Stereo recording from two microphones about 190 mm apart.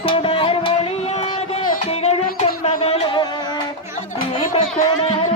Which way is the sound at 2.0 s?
35° left (ahead or behind).